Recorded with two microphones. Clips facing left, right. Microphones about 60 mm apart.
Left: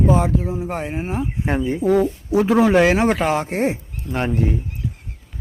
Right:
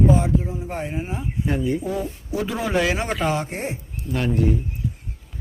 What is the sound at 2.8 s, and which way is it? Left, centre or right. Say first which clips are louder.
Speech: left 7 dB; left.